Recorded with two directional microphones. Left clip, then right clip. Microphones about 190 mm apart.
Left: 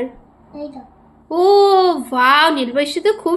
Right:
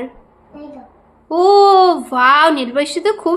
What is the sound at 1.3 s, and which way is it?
A child's voice, 10° right (ahead or behind).